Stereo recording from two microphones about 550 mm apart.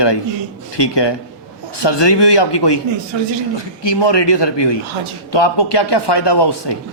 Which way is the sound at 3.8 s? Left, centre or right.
Left.